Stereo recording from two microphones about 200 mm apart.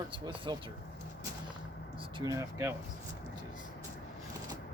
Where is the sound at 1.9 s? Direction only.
25° right (ahead or behind).